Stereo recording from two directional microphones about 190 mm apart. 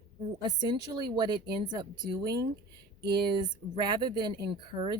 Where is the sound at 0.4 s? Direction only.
20° right (ahead or behind).